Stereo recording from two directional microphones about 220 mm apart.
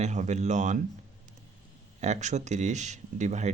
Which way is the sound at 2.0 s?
30° right (ahead or behind).